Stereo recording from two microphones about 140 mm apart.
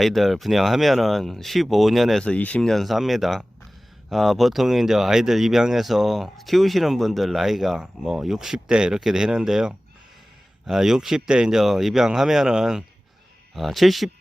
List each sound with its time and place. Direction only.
0.0 s speech: centre (ahead or behind)